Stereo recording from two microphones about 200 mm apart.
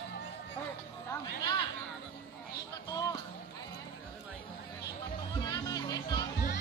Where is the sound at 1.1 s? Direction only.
20° left (ahead or behind).